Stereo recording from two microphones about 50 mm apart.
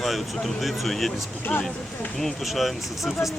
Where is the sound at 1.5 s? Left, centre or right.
Left.